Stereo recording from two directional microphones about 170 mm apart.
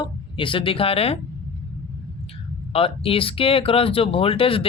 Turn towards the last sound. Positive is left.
turn(degrees=30)  # may be behind; listen again after turning